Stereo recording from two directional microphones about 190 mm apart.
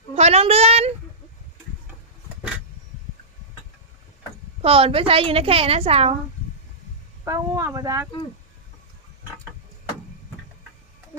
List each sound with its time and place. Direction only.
0.1 s a child's voice: 35° right (ahead or behind)
4.6 s a woman's voice: 30° right (ahead or behind)
7.3 s speech: 15° right (ahead or behind)